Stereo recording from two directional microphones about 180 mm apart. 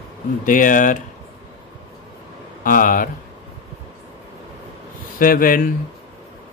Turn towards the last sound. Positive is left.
turn(degrees=50)  # may be behind; listen again after turning